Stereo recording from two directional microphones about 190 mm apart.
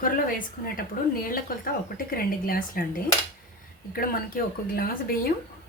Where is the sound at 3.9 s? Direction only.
50° left (ahead or behind).